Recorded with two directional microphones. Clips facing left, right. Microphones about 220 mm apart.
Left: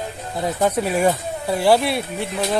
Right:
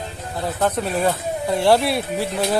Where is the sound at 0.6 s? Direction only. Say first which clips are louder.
Left 2 dB; 10° left (ahead or behind).